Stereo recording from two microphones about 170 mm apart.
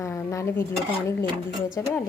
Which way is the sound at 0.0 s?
15° left (ahead or behind).